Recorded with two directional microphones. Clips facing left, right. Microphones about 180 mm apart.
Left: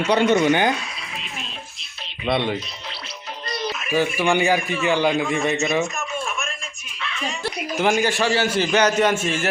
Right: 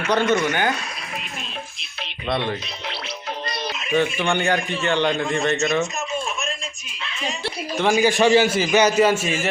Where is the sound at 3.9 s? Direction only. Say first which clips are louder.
Even; 5° left (ahead or behind).